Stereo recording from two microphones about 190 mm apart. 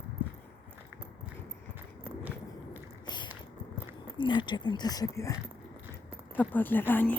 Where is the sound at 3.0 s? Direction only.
25° left (ahead or behind).